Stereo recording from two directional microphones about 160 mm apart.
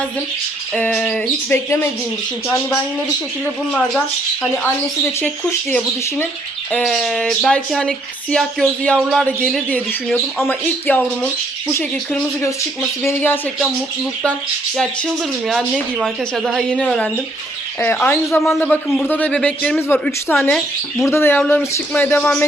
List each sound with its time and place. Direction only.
0.8 s speech: 5° left (ahead or behind)
3.4 s speech: 5° left (ahead or behind)
5.2 s speech: 15° left (ahead or behind)
6.7 s speech: centre (ahead or behind)
15.4 s speech: centre (ahead or behind)
18.3 s speech: centre (ahead or behind)